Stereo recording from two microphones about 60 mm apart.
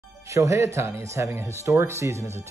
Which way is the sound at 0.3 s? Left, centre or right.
Right.